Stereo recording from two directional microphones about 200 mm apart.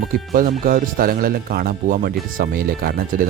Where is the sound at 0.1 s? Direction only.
45° right (ahead or behind).